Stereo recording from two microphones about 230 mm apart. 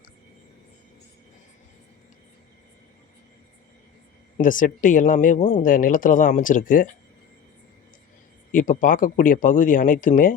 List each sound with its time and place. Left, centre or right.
4.4 s speech: left
8.5 s speech: left